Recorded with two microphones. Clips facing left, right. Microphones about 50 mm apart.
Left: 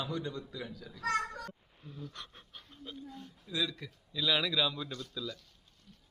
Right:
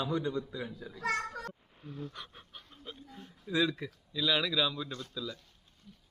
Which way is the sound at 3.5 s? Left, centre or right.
Right.